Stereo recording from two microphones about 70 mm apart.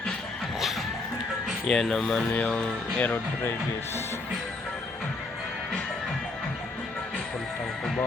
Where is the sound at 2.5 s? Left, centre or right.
Centre.